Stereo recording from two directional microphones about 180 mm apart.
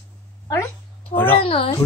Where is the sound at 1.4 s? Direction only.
30° left (ahead or behind).